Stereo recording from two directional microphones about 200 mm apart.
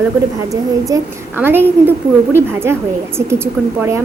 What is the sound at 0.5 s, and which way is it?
A woman's voice, 15° right (ahead or behind).